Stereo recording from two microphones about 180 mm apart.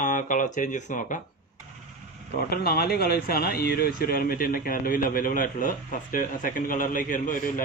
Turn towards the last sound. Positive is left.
turn(degrees=45)  # may be behind; listen again after turning